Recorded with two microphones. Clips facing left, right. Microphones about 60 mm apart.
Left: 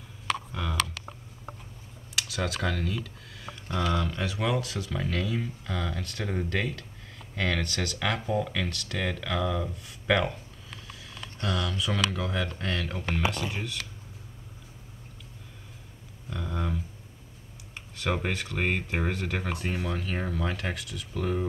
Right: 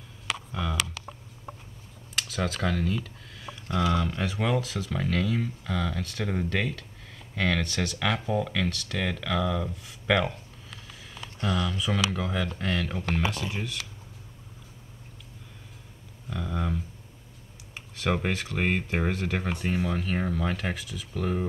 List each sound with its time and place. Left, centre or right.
0.5 s a sound: centre
2.2 s speech: centre
3.4 s a sound: centre
3.8 s speech: centre
11.1 s speech: centre
16.3 s a sound: centre
17.7 s speech: centre
19.6 s speech: right
19.9 s speech: centre